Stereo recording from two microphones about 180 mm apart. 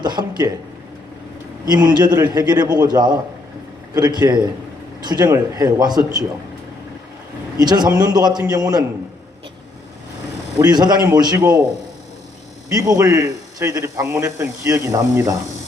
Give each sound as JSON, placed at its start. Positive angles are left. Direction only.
{"t": 0.0, "sound": "a man's voice", "side_deg": -25}
{"t": 1.6, "sound": "a man's voice", "side_deg": -20}
{"t": 7.6, "sound": "a man's voice", "side_deg": -20}
{"t": 10.6, "sound": "a man's voice", "side_deg": -20}
{"t": 12.6, "sound": "a man's voice", "side_deg": -20}